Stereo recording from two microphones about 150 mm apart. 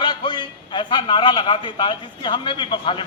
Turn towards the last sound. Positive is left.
turn(degrees=35)  # may be behind; listen again after turning